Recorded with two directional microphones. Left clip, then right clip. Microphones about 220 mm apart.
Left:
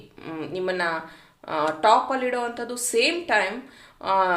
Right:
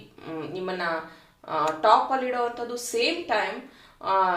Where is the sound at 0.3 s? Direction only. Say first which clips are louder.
Left 4 dB; 40° left (ahead or behind).